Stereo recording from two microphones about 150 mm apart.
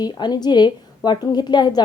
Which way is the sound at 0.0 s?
30° left (ahead or behind).